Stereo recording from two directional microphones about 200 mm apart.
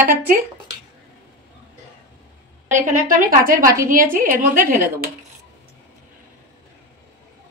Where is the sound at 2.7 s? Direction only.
40° right (ahead or behind).